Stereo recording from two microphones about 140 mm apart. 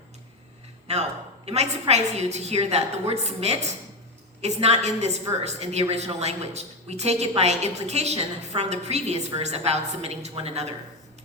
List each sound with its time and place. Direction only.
0.9 s a woman's voice: 50° right (ahead or behind)